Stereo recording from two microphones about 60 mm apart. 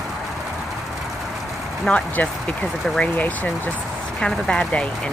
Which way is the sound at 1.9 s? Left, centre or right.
Left.